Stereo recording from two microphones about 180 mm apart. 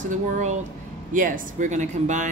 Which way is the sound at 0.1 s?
40° right (ahead or behind).